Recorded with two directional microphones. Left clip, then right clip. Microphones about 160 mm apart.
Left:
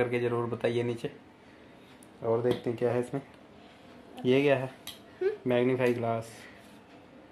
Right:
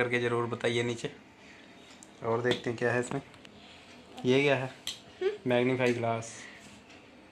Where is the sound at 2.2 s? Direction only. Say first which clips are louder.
Left 1 dB; centre (ahead or behind).